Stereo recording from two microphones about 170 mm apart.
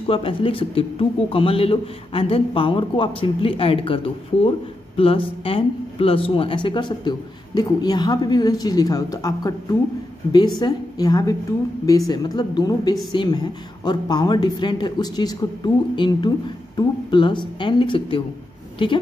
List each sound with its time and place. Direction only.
0.1 s a man's voice: 30° left (ahead or behind)